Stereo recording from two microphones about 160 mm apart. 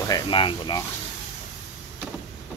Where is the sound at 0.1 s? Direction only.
30° left (ahead or behind).